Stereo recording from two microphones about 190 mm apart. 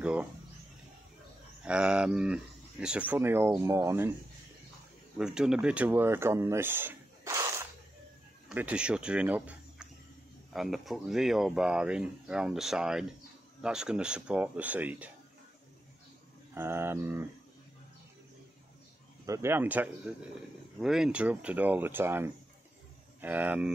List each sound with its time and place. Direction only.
0.0 s speech: 5° right (ahead or behind)
1.6 s speech: 5° right (ahead or behind)
5.1 s speech: 5° right (ahead or behind)
8.5 s speech: 5° right (ahead or behind)
16.5 s speech: 10° right (ahead or behind)
19.2 s speech: 15° right (ahead or behind)